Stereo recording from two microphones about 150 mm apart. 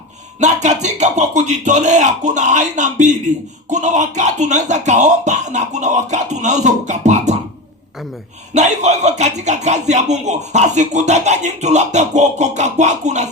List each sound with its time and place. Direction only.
0.3 s speech: 50° right (ahead or behind)
8.5 s speech: 50° right (ahead or behind)